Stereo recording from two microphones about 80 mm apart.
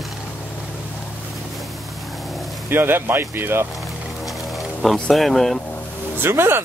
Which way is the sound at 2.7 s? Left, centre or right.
Right.